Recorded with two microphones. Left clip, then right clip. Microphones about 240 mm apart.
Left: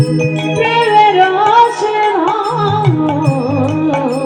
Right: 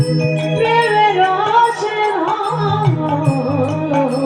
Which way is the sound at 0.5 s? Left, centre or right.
Left.